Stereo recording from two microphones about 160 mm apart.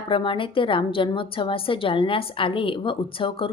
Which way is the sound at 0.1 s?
30° left (ahead or behind).